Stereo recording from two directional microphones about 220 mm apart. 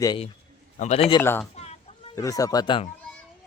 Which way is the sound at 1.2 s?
10° left (ahead or behind).